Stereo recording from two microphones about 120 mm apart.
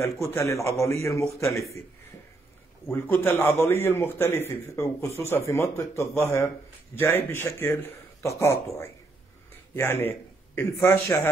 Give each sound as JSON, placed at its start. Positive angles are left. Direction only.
{"t": 0.0, "sound": "a man's voice", "side_deg": 25}
{"t": 2.9, "sound": "a man's voice", "side_deg": 20}